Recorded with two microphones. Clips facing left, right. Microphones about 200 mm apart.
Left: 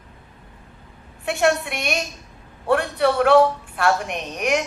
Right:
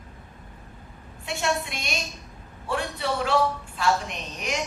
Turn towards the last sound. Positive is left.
turn(degrees=60)  # may be behind; listen again after turning